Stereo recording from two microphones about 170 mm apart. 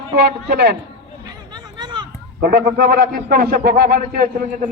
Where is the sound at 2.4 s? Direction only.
65° right (ahead or behind).